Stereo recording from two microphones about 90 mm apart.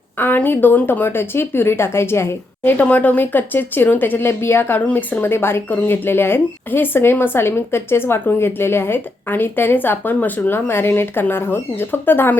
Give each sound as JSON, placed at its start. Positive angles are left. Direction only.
{"t": 0.2, "sound": "speech", "side_deg": 20}
{"t": 2.7, "sound": "speech", "side_deg": 15}